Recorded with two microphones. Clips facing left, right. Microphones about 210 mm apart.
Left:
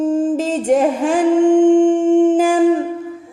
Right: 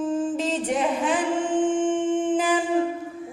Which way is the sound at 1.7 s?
40° left (ahead or behind).